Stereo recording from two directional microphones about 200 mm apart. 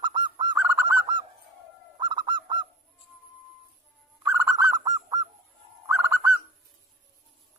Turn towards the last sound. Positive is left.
turn(degrees=-10)  # may be behind; listen again after turning